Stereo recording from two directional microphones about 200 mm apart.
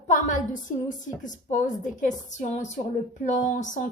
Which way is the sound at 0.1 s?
40° left (ahead or behind).